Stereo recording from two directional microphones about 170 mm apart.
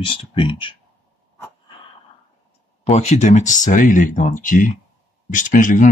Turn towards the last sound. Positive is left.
turn(degrees=50)  # may be behind; listen again after turning